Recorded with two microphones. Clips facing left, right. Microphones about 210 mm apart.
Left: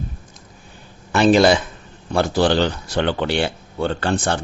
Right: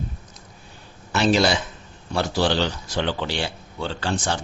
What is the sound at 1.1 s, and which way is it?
Speech, 55° left (ahead or behind).